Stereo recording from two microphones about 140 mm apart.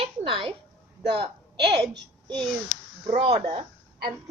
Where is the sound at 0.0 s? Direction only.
40° right (ahead or behind).